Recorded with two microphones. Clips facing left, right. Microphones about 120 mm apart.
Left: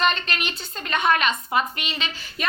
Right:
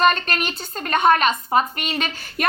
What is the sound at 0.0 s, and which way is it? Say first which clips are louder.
A woman's voice: right 5 dB; 45° right (ahead or behind).